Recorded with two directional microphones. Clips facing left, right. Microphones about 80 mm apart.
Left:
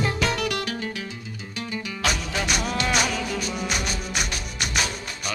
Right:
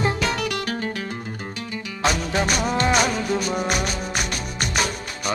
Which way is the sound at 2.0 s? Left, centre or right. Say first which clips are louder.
Right 6 dB; right.